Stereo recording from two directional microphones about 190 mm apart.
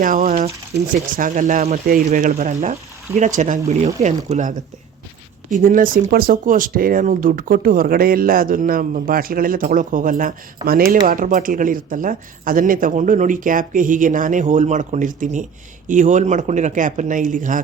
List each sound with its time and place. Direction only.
0.0 s speech: 40° right (ahead or behind)